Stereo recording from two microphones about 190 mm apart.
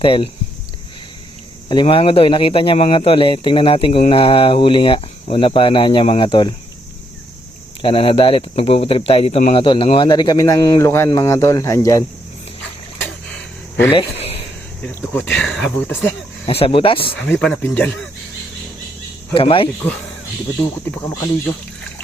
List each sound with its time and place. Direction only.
0.0 s speech: 25° left (ahead or behind)
1.7 s speech: 25° left (ahead or behind)
7.8 s speech: 30° left (ahead or behind)
13.9 s speech: 30° left (ahead or behind)
15.1 s speech: 10° left (ahead or behind)
16.5 s speech: 30° left (ahead or behind)
17.3 s speech: 10° left (ahead or behind)
19.3 s speech: 30° left (ahead or behind)
20.6 s speech: 15° left (ahead or behind)